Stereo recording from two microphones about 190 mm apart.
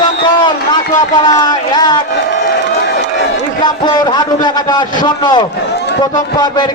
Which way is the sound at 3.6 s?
20° left (ahead or behind).